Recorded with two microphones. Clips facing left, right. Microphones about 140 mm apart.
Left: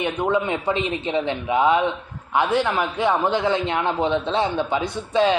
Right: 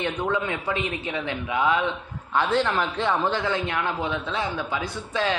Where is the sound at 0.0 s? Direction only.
20° left (ahead or behind).